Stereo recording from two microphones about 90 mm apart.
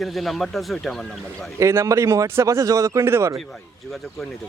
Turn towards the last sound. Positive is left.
turn(degrees=-30)  # may be behind; listen again after turning